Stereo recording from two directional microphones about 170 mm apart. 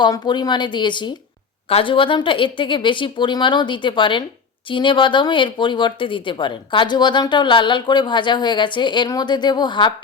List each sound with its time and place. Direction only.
0.0 s speech: 25° left (ahead or behind)